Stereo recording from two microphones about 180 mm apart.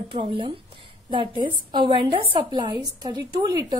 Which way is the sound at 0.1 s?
30° right (ahead or behind).